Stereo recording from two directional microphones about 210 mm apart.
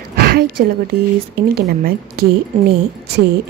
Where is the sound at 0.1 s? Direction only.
50° right (ahead or behind).